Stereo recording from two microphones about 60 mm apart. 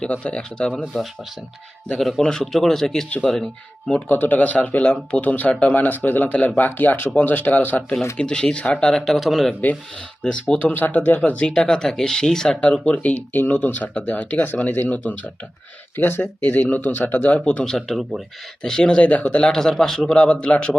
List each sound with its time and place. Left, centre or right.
0.0 s a man's voice: left
0.9 s a man's voice: centre
3.8 s a man's voice: left
8.2 s a man's voice: centre
8.9 s a man's voice: centre
10.2 s a man's voice: left
16.4 s a man's voice: left
17.7 s speech: centre
19.5 s a man's voice: centre
20.1 s speech: centre